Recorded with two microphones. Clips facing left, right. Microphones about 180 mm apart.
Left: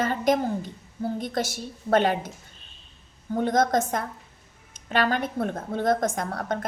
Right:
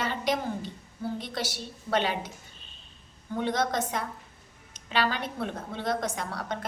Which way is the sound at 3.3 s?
45° left (ahead or behind).